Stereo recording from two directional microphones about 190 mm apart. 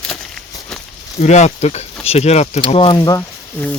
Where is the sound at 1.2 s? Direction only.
35° left (ahead or behind); by 3.7 s 10° left (ahead or behind).